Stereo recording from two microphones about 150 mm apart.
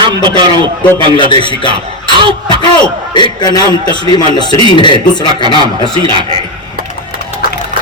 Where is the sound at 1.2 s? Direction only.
30° left (ahead or behind).